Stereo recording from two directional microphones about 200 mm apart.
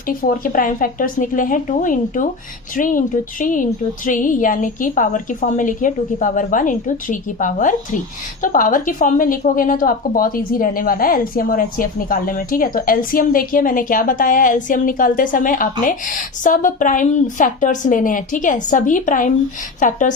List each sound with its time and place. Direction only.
0.1 s a woman's voice: 45° left (ahead or behind)